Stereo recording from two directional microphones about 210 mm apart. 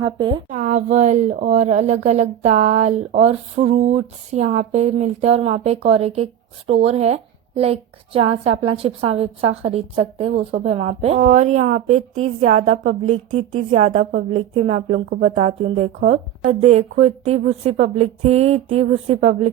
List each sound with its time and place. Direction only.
0.0 s a woman's voice: 20° right (ahead or behind)
0.5 s a woman's voice: 35° right (ahead or behind)